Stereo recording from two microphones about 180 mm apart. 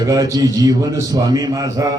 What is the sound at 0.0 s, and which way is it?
A man's voice, 20° right (ahead or behind).